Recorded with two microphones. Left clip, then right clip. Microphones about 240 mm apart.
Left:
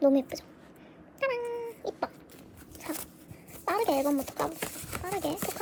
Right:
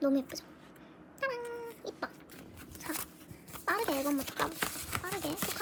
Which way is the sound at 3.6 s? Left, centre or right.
Centre.